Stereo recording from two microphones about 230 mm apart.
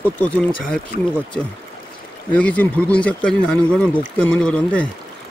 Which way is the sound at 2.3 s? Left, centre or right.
Centre.